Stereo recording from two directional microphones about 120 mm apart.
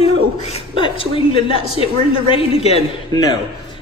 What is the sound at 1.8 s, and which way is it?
A woman's voice, 50° left (ahead or behind).